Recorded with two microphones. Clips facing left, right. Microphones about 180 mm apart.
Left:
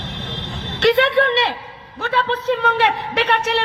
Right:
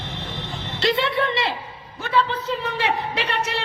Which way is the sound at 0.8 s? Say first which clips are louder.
Left 7 dB; 75° left (ahead or behind).